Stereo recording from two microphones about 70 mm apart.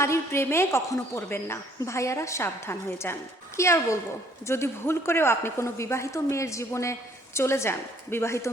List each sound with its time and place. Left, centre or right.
0.0 s a woman's voice: left
1.8 s a woman's voice: left